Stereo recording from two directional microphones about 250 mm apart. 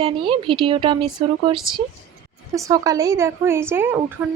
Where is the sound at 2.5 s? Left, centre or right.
Centre.